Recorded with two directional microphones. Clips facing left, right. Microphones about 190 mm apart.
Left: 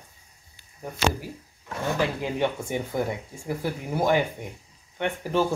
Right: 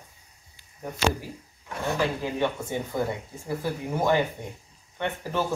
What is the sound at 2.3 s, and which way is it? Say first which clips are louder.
Speech: left 1 dB; 15° left (ahead or behind).